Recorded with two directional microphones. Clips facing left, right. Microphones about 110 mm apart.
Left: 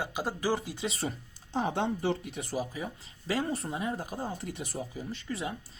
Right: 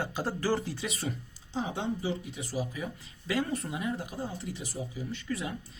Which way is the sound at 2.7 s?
30° left (ahead or behind).